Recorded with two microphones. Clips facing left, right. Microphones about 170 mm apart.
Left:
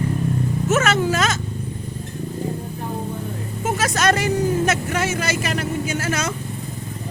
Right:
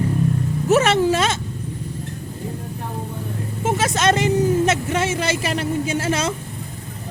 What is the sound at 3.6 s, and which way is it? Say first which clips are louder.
Speech: right 1 dB; 25° right (ahead or behind).